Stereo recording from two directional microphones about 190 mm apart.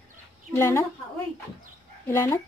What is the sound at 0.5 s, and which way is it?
Speech, 15° left (ahead or behind).